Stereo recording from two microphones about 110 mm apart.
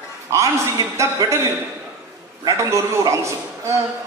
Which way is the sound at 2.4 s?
30° right (ahead or behind).